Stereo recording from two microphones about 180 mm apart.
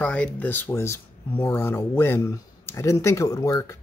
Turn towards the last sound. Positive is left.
turn(degrees=15)  # may be behind; listen again after turning